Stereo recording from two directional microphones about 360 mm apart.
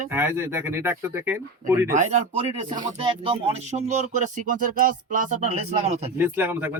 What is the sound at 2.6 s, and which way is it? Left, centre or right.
Music, centre.